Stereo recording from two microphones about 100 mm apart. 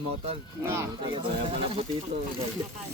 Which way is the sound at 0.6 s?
25° right (ahead or behind).